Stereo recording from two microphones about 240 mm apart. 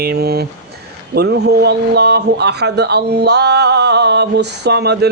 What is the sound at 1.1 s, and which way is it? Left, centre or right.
A man's voice, right.